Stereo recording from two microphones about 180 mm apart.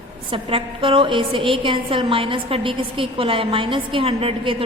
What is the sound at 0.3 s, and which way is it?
A woman's voice, 30° right (ahead or behind).